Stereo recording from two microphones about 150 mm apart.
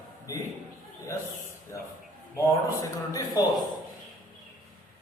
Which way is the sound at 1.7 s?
20° left (ahead or behind).